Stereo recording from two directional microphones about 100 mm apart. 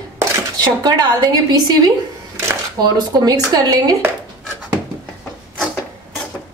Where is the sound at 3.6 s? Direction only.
40° right (ahead or behind).